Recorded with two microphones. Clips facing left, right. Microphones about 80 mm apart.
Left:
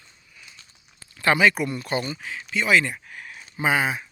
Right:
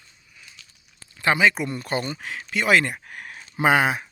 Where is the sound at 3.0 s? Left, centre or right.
Right.